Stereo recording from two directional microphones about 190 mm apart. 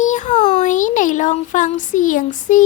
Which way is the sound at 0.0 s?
40° left (ahead or behind).